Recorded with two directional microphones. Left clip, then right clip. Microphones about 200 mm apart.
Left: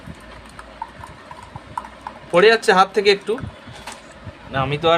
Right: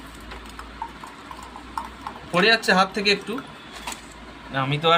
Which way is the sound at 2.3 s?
60° left (ahead or behind).